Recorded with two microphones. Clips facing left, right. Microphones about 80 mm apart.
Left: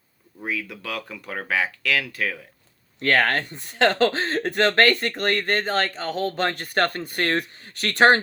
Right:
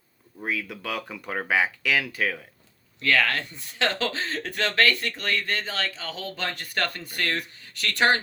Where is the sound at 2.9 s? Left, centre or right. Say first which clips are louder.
Left 3 dB; left.